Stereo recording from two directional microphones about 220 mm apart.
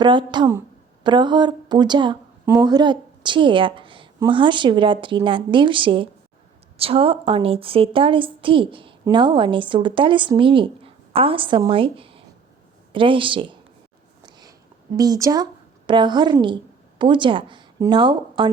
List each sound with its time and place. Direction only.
0.0 s a woman's voice: 20° right (ahead or behind)
14.2 s a sound: 20° right (ahead or behind)
14.9 s a woman's voice: 15° right (ahead or behind)